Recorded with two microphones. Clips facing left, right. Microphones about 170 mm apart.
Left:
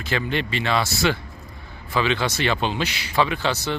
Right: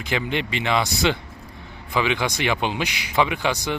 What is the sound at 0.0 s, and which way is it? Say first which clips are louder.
A man's voice: even; 15° right (ahead or behind).